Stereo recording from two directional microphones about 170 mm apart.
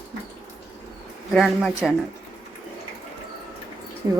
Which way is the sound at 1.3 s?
Centre (ahead or behind).